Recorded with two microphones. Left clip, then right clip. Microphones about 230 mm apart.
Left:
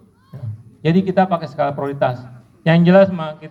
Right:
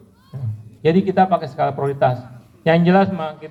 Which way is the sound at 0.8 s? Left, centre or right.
Left.